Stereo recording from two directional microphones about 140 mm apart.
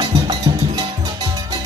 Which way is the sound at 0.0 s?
30° right (ahead or behind).